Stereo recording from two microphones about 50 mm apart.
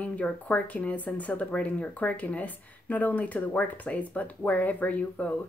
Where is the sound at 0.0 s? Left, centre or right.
Left.